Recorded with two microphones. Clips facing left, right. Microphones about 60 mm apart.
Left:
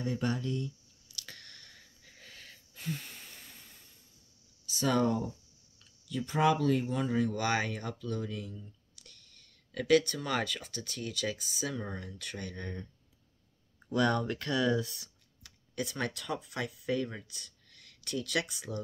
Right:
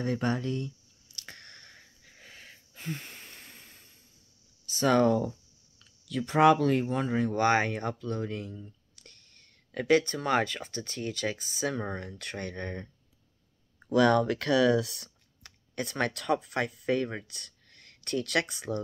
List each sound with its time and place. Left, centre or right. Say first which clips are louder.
0.2 s speech: right 3 dB; right
1.0 s chewing: right 2 dB; right
2.0 s a sound: right 1 dB; centre; by 3.7 s right
4.6 s speech: right 5 dB; right
6.0 s speech: right 6 dB; right
13.9 s speech: right 6 dB; right
15.4 s speech: right 2 dB; right
17.6 s speech: right 7 dB; right